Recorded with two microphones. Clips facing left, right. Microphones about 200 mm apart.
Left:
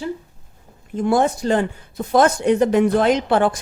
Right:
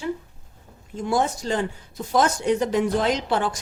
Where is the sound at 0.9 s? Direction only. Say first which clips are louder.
Left 6 dB; 60° left (ahead or behind).